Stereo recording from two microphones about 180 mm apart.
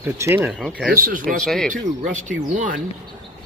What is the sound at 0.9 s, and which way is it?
Speech, 50° right (ahead or behind).